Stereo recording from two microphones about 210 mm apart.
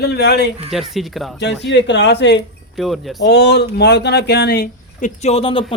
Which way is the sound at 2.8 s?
Centre (ahead or behind).